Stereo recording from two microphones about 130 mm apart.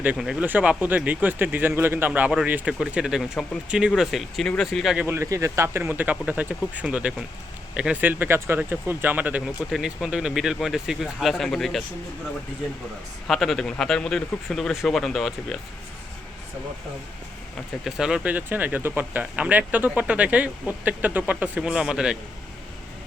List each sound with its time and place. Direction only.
0.0 s speech: 10° right (ahead or behind)
5.0 s a man's voice: 20° right (ahead or behind); by 11.8 s centre (ahead or behind)
13.2 s a man's voice: centre (ahead or behind)
17.8 s speech: 5° right (ahead or behind)